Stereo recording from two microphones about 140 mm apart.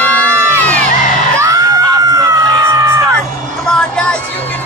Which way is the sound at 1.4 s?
25° right (ahead or behind).